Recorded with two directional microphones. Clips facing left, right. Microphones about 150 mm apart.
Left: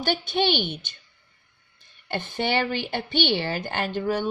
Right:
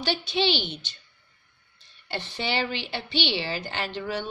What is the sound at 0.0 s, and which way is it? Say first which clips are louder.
A woman's voice: left 2 dB; 50° left (ahead or behind).